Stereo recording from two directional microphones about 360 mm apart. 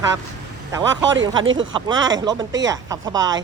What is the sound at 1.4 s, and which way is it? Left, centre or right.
Speech, right.